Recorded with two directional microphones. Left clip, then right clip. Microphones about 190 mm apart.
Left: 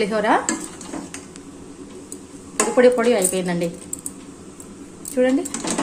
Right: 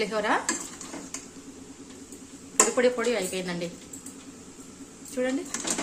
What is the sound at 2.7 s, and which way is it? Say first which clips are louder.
Speech: left 14 dB; centre (ahead or behind).